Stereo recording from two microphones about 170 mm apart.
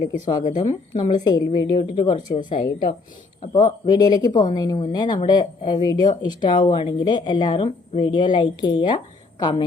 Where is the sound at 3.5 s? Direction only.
25° left (ahead or behind).